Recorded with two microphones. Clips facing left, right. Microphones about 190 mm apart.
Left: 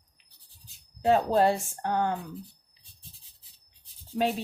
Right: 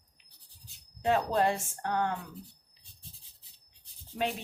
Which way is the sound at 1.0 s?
35° left (ahead or behind).